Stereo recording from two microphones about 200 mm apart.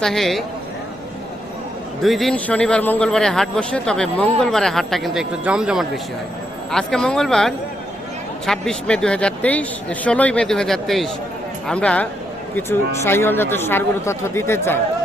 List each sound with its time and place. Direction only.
0.0 s a man's voice: centre (ahead or behind)
2.0 s a man's voice: centre (ahead or behind)